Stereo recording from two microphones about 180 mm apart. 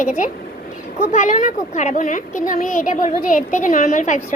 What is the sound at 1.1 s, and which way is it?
A woman's voice, 40° left (ahead or behind).